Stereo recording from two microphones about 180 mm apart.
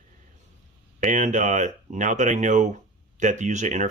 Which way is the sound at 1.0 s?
45° right (ahead or behind).